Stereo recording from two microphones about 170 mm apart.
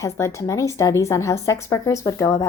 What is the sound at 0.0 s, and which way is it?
A woman's voice, 15° left (ahead or behind).